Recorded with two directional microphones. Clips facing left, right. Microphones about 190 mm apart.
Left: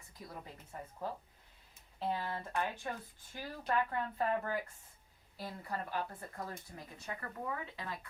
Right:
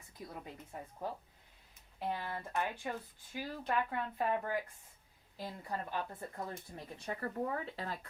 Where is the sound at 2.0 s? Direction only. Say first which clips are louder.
Left 1 dB; 15° right (ahead or behind).